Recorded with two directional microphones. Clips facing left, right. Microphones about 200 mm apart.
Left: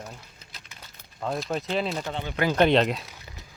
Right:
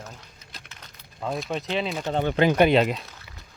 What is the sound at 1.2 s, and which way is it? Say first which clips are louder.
Speech: even; centre (ahead or behind).